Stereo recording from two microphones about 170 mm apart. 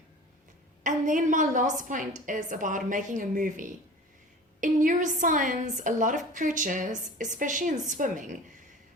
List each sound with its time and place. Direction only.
0.9 s a woman's voice: 50° right (ahead or behind)